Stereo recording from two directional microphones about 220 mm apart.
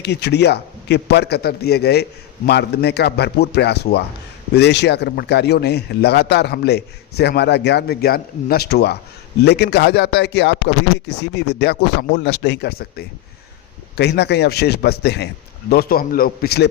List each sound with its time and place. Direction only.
0.0 s speech: 50° left (ahead or behind)